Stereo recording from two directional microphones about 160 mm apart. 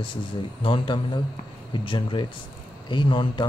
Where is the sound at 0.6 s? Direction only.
30° left (ahead or behind).